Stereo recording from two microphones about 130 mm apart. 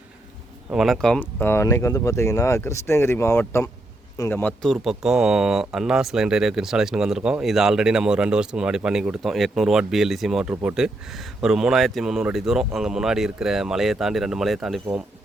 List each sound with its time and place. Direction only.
0.7 s speech: centre (ahead or behind)